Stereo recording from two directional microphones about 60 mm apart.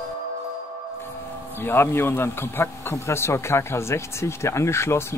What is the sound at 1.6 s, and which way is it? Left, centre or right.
Speech, left.